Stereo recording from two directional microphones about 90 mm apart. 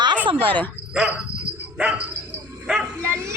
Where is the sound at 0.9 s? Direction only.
10° right (ahead or behind).